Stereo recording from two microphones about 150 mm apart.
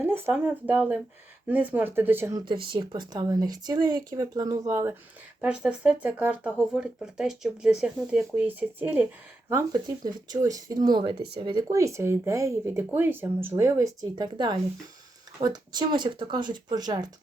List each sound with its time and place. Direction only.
0.0 s speech: 15° right (ahead or behind)
2.7 s speech: 30° right (ahead or behind)
5.4 s speech: 10° right (ahead or behind)
9.5 s speech: 25° right (ahead or behind)